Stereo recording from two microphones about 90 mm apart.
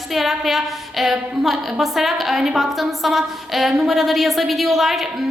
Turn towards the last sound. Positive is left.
turn(degrees=0)  # may be behind; listen again after turning